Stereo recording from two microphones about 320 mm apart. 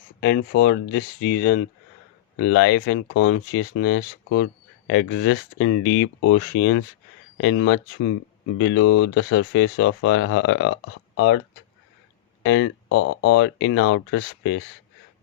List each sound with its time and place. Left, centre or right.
0.2 s speech: left
12.4 s speech: left